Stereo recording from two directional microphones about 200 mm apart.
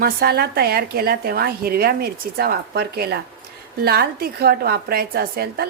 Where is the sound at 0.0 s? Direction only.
50° right (ahead or behind).